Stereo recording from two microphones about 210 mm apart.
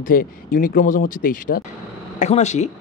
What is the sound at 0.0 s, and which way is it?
A man's voice, 40° left (ahead or behind).